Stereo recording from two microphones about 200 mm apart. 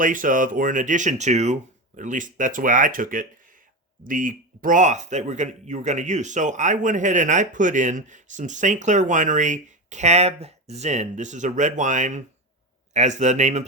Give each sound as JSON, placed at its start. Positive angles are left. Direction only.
{"t": 0.0, "sound": "a man's voice", "side_deg": -40}